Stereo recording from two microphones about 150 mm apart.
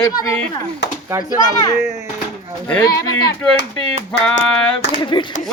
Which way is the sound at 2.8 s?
25° left (ahead or behind).